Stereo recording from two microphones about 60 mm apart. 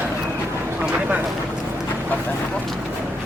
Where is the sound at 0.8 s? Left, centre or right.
Right.